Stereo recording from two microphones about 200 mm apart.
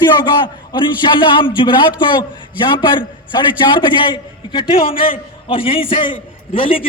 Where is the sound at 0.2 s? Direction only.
20° left (ahead or behind).